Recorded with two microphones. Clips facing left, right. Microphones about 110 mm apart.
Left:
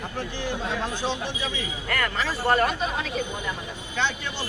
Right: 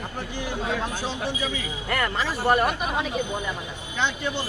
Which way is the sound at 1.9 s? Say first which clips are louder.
Right 1 dB; 15° right (ahead or behind).